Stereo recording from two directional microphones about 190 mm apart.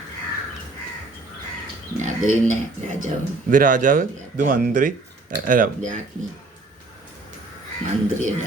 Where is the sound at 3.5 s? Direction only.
45° right (ahead or behind).